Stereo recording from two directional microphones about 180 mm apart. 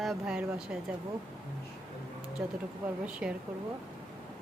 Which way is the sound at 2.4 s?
5° right (ahead or behind).